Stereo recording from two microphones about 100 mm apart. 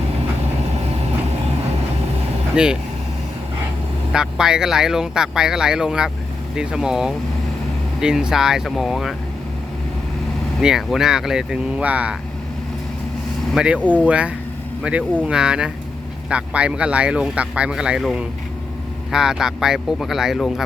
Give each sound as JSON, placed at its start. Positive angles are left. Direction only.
{"t": 2.6, "sound": "speech", "side_deg": -10}
{"t": 4.1, "sound": "speech", "side_deg": -5}
{"t": 10.6, "sound": "speech", "side_deg": -5}
{"t": 13.5, "sound": "speech", "side_deg": -10}